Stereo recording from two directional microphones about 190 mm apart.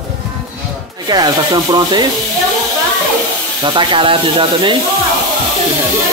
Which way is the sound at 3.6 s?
25° right (ahead or behind).